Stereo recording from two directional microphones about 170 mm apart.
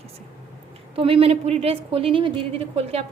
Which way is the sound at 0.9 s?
35° right (ahead or behind).